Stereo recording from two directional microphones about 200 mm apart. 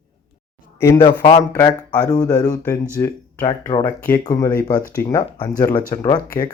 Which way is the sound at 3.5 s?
25° left (ahead or behind).